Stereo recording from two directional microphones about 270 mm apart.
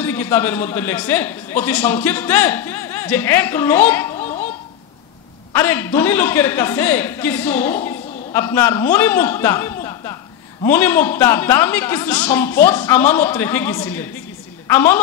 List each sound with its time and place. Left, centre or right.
0.0 s a man's voice: centre
4.2 s a sound: left
5.5 s a man's voice: centre